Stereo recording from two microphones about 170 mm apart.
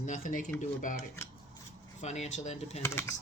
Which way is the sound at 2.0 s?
40° left (ahead or behind).